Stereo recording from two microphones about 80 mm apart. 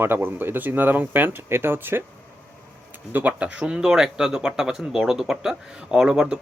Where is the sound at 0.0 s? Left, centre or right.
Right.